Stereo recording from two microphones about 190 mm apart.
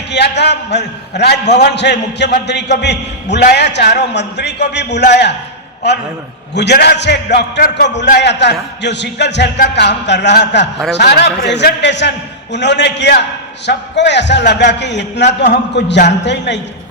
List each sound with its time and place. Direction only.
0.1 s a man's voice: 65° left (ahead or behind)